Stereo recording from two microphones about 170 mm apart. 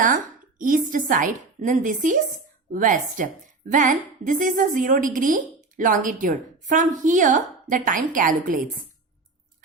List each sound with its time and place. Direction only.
0.6 s a woman's voice: 50° right (ahead or behind)